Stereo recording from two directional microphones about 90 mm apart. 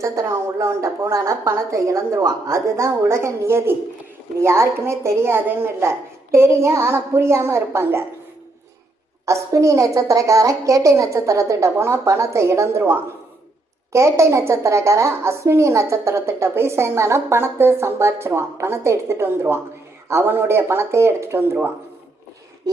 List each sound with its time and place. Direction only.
0.0 s a woman's voice: 30° right (ahead or behind)
9.2 s a woman's voice: 35° right (ahead or behind)